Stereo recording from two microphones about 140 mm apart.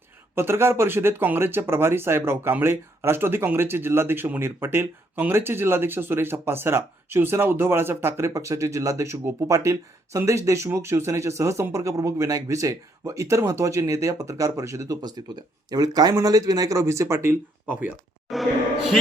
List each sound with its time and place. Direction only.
0.3 s speech: 15° right (ahead or behind)
18.3 s music: centre (ahead or behind)